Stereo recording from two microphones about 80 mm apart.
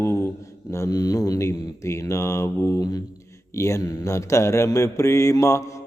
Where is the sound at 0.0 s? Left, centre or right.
Left.